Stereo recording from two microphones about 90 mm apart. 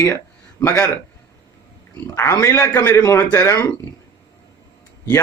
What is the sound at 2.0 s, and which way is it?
Speech, 30° left (ahead or behind).